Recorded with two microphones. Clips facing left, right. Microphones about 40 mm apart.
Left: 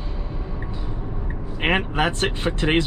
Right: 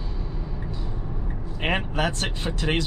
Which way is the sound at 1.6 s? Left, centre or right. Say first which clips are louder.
Left 4 dB; left.